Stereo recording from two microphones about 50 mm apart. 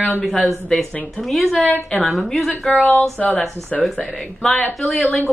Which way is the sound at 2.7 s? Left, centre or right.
Left.